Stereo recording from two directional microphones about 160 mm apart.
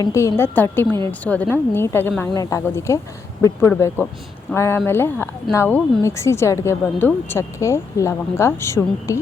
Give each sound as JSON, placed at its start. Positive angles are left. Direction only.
{"t": 0.0, "sound": "speech", "side_deg": 20}